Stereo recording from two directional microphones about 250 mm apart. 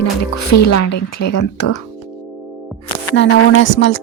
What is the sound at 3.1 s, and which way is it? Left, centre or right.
Speech, left.